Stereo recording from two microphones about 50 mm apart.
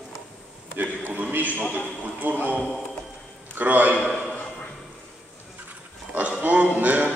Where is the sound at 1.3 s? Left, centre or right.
Right.